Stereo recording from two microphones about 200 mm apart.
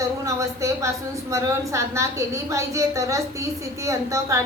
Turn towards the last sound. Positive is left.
turn(degrees=-15)  # may be behind; listen again after turning